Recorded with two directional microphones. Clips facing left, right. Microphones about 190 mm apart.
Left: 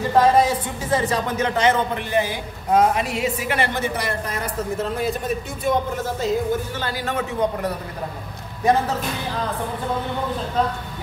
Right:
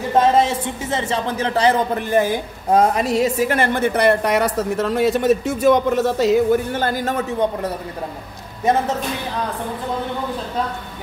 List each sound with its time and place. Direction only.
0.1 s a woman's voice: 25° right (ahead or behind); by 6.4 s 80° right
6.7 s a woman's voice: 50° right (ahead or behind)